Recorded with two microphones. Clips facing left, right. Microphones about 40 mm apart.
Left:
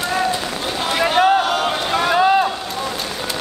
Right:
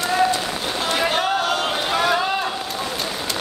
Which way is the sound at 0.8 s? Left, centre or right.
Centre.